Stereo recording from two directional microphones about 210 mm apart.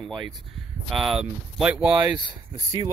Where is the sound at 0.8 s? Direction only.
Centre (ahead or behind).